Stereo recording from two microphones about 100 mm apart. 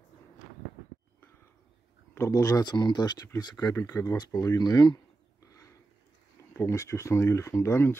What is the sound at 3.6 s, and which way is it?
Speech, 30° left (ahead or behind).